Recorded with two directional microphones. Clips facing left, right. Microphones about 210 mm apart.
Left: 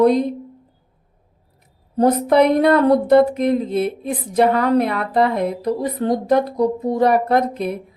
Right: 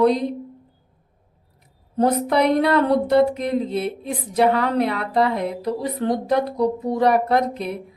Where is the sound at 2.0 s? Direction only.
50° left (ahead or behind).